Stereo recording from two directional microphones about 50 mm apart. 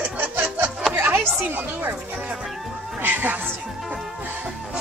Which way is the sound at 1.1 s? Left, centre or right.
Right.